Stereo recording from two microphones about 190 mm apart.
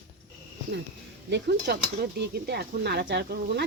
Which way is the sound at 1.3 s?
60° right (ahead or behind).